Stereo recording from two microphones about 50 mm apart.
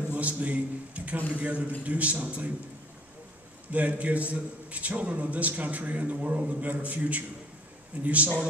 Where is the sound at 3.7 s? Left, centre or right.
Right.